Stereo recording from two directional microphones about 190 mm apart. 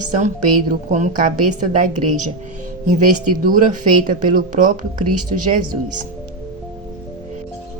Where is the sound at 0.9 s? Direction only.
40° right (ahead or behind).